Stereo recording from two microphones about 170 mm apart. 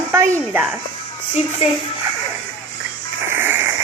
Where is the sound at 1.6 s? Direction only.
40° left (ahead or behind).